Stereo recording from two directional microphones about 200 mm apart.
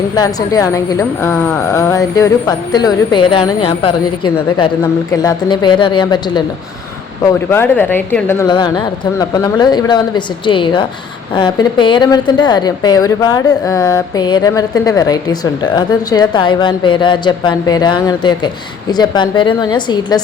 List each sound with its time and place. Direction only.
0.2 s a woman's voice: 20° left (ahead or behind)
7.5 s a woman's voice: 10° left (ahead or behind)
8.4 s a woman's voice: 20° left (ahead or behind)